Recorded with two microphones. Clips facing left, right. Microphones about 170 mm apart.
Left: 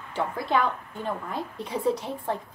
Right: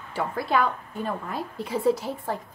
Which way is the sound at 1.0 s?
5° right (ahead or behind).